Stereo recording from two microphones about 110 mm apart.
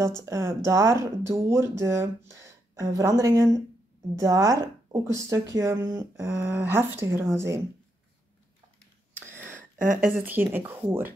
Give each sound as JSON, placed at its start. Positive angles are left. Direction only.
{"t": 0.2, "sound": "speech", "side_deg": -25}
{"t": 9.1, "sound": "a sound", "side_deg": -20}
{"t": 10.2, "sound": "speech", "side_deg": -15}